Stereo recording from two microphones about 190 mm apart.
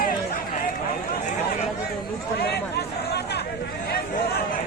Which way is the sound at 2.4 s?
60° left (ahead or behind).